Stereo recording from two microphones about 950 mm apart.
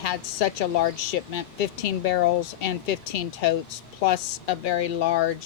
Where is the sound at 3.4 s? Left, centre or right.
Left.